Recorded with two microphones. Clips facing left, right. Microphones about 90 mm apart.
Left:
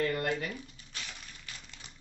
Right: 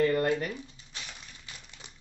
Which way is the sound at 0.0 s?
40° right (ahead or behind).